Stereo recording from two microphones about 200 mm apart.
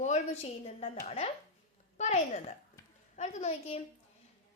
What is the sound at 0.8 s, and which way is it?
A woman's voice, 30° left (ahead or behind).